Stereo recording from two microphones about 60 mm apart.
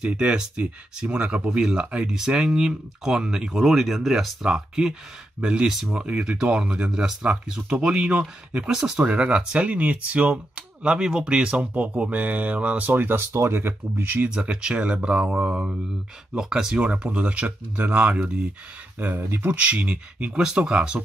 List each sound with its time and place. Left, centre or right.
0.0 s speech: centre; by 13.6 s right
13.6 s speech: right
14.1 s speech: right
16.8 s speech: centre
18.9 s speech: right